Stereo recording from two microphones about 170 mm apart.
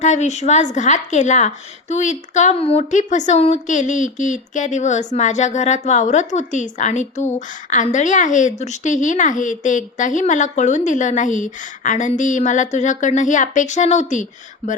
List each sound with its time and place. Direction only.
0.0 s a woman's voice: 45° left (ahead or behind)